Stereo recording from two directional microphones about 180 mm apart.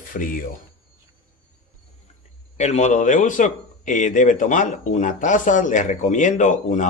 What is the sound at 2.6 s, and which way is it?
A man's voice, 40° left (ahead or behind).